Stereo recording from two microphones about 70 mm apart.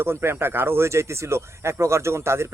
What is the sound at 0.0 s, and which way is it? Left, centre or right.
Speech, right.